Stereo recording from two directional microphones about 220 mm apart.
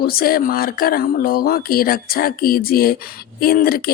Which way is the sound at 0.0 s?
40° left (ahead or behind).